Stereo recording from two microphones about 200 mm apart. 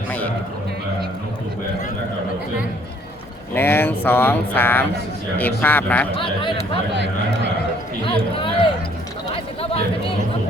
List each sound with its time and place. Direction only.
3.5 s speech: 10° left (ahead or behind)
6.1 s speech: 25° left (ahead or behind)
6.6 s speech: 60° right (ahead or behind)
8.0 s speech: 25° left (ahead or behind)
9.3 s chatter: 30° left (ahead or behind)